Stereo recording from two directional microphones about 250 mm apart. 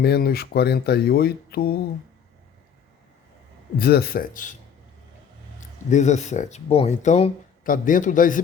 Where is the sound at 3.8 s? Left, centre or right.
Left.